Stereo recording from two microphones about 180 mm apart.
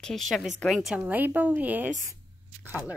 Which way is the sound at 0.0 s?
Centre (ahead or behind).